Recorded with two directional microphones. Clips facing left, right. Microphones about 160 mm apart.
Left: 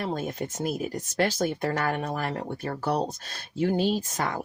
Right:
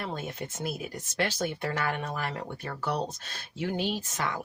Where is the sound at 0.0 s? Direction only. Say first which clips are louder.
Left 5 dB; 40° left (ahead or behind).